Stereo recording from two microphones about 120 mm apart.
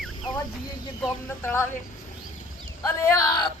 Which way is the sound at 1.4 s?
20° left (ahead or behind).